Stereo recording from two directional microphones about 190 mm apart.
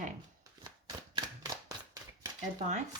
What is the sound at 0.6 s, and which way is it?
Shuffling cards, 20° right (ahead or behind).